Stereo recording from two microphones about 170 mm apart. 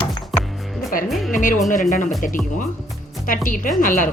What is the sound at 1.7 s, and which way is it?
Speech, 50° left (ahead or behind).